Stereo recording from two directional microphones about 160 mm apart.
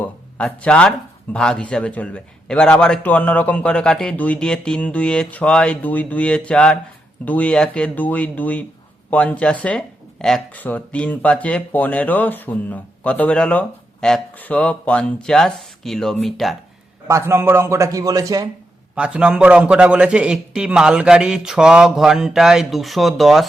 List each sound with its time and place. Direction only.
0.0 s a man's voice: 10° left (ahead or behind)
17.1 s a man's voice: 15° right (ahead or behind)
18.9 s a man's voice: 5° right (ahead or behind)